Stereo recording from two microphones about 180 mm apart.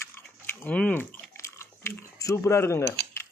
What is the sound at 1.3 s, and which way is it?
Chewing, 15° left (ahead or behind).